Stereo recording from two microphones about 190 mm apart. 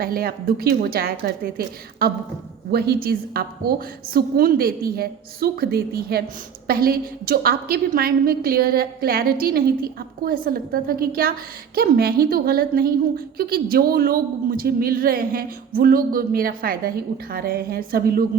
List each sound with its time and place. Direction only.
0.0 s a woman's voice: 50° right (ahead or behind)